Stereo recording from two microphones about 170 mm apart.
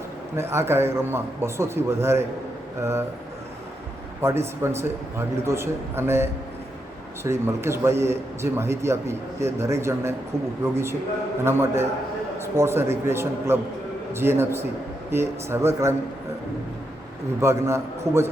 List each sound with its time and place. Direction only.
0.3 s a man's voice: 15° right (ahead or behind)
4.2 s a man's voice: 15° right (ahead or behind)
11.4 s a man's voice: 15° right (ahead or behind)
17.4 s a man's voice: 15° right (ahead or behind)